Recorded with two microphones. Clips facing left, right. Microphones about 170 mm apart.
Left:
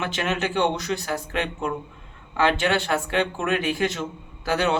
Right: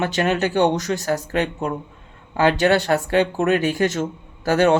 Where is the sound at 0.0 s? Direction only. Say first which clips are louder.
Right 6 dB; 40° right (ahead or behind).